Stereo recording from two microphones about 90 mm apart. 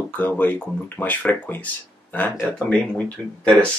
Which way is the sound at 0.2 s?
20° left (ahead or behind).